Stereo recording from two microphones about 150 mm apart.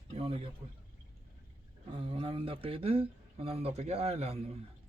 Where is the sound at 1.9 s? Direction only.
40° right (ahead or behind).